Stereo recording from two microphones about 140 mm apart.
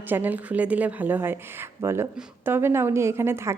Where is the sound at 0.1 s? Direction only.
10° right (ahead or behind).